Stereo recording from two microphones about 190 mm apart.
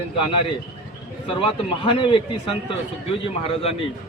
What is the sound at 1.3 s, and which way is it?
Speech, 30° left (ahead or behind).